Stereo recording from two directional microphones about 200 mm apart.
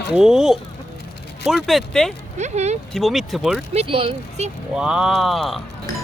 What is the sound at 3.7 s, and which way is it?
Speech, 30° right (ahead or behind).